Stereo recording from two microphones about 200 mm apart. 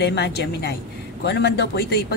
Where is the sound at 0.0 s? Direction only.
55° left (ahead or behind).